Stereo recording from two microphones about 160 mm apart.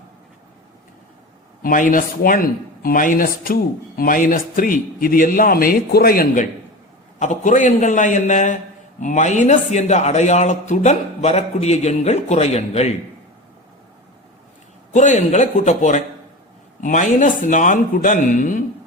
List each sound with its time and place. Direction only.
1.6 s a man's voice: 60° left (ahead or behind); by 12.9 s 40° left (ahead or behind)
14.9 s a man's voice: 50° left (ahead or behind)